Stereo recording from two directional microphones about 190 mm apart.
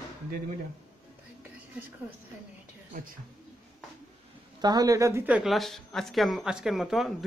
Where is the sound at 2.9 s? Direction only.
45° right (ahead or behind).